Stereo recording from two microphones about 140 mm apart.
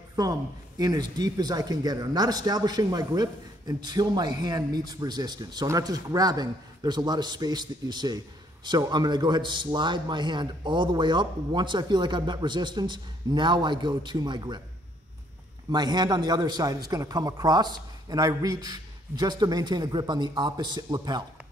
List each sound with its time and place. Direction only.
0.1 s a man's voice: 25° right (ahead or behind)
15.7 s speech: 30° right (ahead or behind)